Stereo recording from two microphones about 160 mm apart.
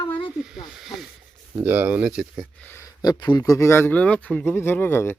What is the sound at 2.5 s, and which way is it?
Speech, 10° left (ahead or behind).